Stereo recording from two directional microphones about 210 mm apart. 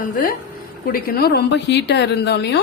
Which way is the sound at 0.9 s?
45° left (ahead or behind).